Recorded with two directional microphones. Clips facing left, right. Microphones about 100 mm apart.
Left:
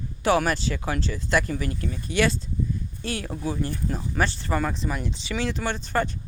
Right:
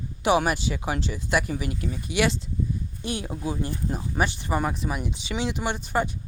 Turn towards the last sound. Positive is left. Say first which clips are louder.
# even
turn(degrees=-15)  # may be behind; listen again after turning